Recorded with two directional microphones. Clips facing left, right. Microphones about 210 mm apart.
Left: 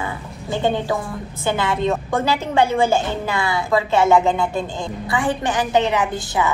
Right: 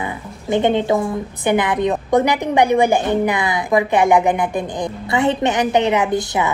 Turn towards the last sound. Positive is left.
turn(degrees=-20)  # may be behind; listen again after turning